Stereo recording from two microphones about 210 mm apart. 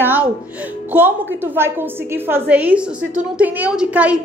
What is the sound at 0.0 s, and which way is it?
A woman's voice, 10° right (ahead or behind).